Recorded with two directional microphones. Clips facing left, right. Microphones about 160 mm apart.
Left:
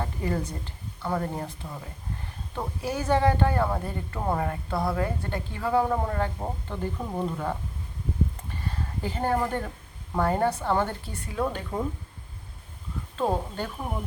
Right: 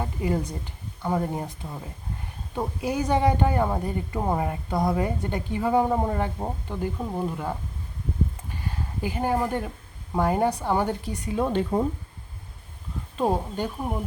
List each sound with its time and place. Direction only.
0.0 s a woman's voice: 15° right (ahead or behind)
2.6 s a woman's voice: 15° right (ahead or behind)
8.6 s a woman's voice: 10° right (ahead or behind)
11.4 s speech: 25° right (ahead or behind)
13.1 s a woman's voice: 15° right (ahead or behind)